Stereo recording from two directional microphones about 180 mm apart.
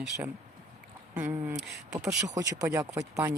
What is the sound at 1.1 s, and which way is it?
Speech, 10° right (ahead or behind).